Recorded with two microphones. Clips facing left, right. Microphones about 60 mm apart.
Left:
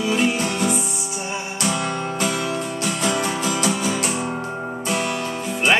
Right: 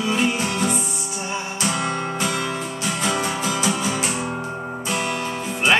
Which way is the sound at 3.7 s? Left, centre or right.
Right.